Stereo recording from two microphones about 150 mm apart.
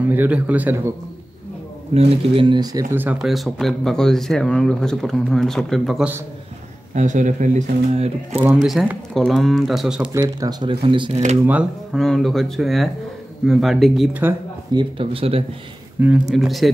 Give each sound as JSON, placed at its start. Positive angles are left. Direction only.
{"t": 0.1, "sound": "speech", "side_deg": -10}
{"t": 2.0, "sound": "speech", "side_deg": -40}
{"t": 7.0, "sound": "speech", "side_deg": -55}
{"t": 8.6, "sound": "speech", "side_deg": 0}
{"t": 10.1, "sound": "speech", "side_deg": -25}
{"t": 11.9, "sound": "speech", "side_deg": 0}
{"t": 14.7, "sound": "speech", "side_deg": -35}
{"t": 16.0, "sound": "speech", "side_deg": -5}